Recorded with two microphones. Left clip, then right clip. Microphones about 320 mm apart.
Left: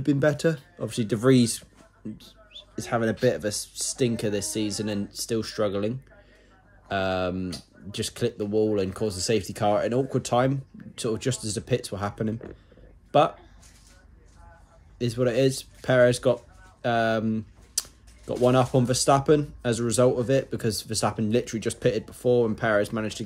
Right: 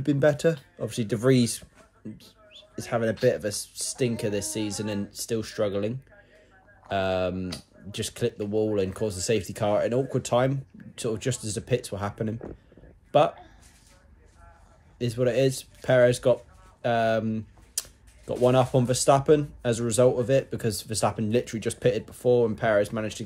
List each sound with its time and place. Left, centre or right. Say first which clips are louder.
0.0 s speech: right 1 dB; centre
15.0 s speech: even; centre